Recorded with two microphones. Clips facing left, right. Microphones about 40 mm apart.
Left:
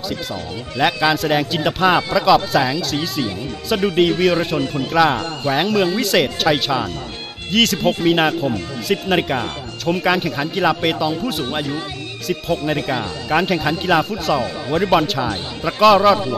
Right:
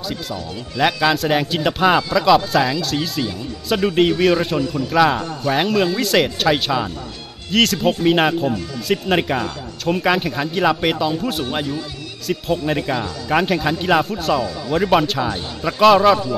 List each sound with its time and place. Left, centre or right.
0.1 s speech: centre
0.7 s speech: centre
4.6 s speech: left
5.5 s speech: centre